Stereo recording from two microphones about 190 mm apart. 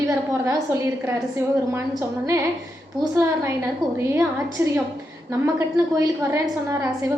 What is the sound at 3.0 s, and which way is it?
A woman's voice, 15° right (ahead or behind).